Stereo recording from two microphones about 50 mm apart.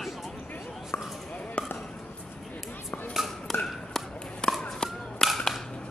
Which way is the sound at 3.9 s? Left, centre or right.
Centre.